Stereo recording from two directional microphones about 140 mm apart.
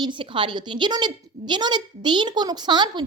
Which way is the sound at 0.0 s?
35° right (ahead or behind).